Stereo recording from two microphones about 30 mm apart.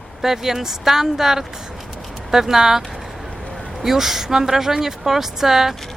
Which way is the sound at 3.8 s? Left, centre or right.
Centre.